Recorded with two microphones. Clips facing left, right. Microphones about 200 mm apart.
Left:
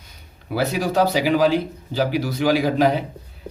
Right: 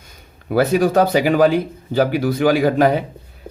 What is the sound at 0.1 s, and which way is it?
Speech, 50° right (ahead or behind).